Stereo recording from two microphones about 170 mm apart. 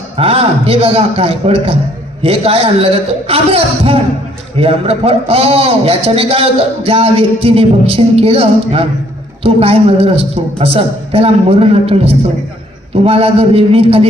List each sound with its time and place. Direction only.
0.2 s a man's voice: 35° right (ahead or behind)